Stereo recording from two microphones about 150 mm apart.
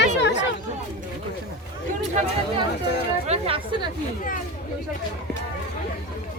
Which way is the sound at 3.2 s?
40° right (ahead or behind).